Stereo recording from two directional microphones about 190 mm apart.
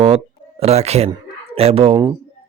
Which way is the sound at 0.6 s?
35° right (ahead or behind).